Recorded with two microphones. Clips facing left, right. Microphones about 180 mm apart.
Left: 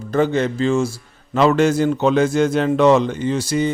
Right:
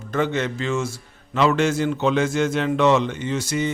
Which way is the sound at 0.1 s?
35° left (ahead or behind).